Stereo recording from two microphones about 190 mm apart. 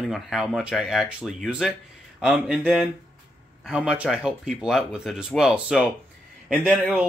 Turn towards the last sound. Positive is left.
turn(degrees=0)  # may be behind; listen again after turning